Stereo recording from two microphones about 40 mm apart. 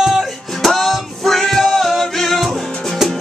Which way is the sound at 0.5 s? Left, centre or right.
Centre.